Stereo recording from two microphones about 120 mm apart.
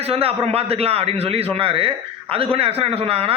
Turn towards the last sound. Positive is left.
turn(degrees=-55)  # may be behind; listen again after turning